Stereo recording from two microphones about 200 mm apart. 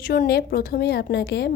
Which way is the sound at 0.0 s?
50° left (ahead or behind).